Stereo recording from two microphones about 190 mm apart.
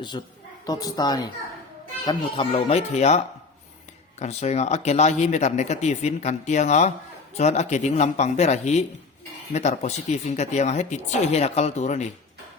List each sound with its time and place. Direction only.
0.1 s a woman's voice: 25° left (ahead or behind)
4.2 s speech: 35° left (ahead or behind)